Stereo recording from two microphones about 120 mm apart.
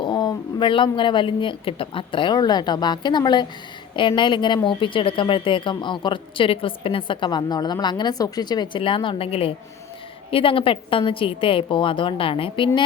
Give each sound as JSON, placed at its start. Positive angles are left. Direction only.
{"t": 0.0, "sound": "a woman's voice", "side_deg": 40}